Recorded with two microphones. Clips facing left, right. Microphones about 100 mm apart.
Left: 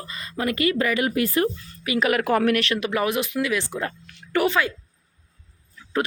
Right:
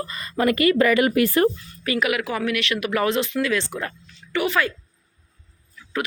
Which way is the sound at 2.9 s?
15° left (ahead or behind).